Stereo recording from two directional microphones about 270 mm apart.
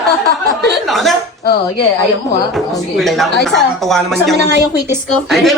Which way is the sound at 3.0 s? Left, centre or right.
Centre.